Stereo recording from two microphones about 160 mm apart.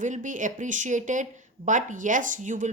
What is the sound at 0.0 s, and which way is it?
Speech, 50° right (ahead or behind).